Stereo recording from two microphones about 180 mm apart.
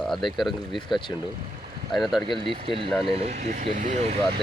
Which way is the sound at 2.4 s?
30° right (ahead or behind).